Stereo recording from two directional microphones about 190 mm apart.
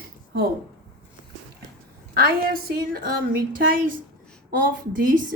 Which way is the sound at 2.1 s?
50° right (ahead or behind).